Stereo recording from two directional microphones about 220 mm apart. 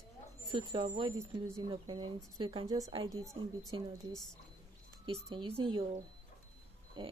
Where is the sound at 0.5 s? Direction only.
20° right (ahead or behind).